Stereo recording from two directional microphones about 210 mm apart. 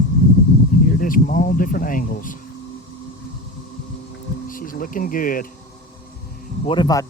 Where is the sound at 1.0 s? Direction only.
40° left (ahead or behind).